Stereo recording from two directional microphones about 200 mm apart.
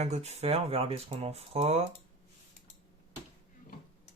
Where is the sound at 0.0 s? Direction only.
30° right (ahead or behind).